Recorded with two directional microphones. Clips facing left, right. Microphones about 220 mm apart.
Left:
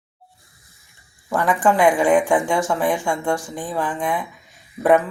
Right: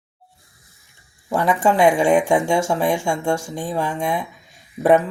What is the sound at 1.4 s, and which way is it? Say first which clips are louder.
A woman's voice: right 1 dB; 25° right (ahead or behind).